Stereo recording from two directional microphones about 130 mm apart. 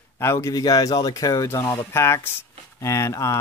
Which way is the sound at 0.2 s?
20° left (ahead or behind).